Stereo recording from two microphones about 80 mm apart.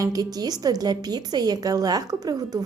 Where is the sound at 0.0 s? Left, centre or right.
Right.